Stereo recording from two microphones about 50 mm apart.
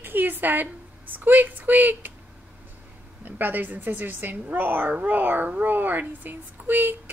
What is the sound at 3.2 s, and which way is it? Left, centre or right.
A woman's voice, right.